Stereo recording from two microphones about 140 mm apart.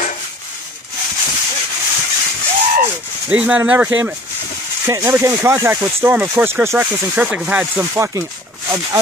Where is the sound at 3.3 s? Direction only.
10° right (ahead or behind).